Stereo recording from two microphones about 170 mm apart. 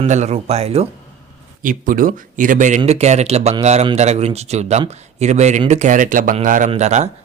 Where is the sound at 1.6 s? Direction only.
55° right (ahead or behind).